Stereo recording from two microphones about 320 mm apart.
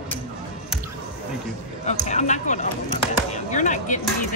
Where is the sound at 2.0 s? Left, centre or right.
Left.